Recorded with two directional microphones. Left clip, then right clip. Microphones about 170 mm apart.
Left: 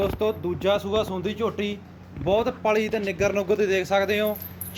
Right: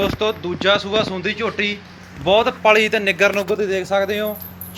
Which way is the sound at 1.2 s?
20° left (ahead or behind).